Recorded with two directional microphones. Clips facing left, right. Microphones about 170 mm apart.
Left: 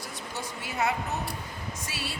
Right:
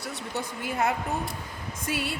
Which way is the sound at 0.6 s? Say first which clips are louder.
Right 2 dB; 50° right (ahead or behind).